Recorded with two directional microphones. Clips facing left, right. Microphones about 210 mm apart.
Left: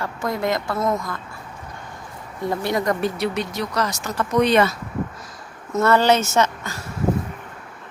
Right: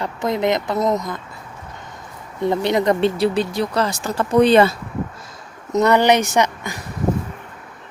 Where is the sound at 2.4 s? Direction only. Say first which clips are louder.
Right 5 dB; 20° right (ahead or behind).